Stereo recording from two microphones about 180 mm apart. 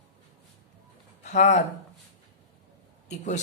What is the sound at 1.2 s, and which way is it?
Speech, 40° left (ahead or behind).